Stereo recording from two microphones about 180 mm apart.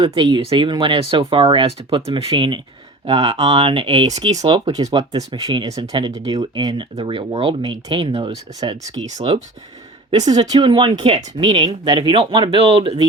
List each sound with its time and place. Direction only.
0.0 s speech: 25° right (ahead or behind)
10.1 s speech: 20° right (ahead or behind)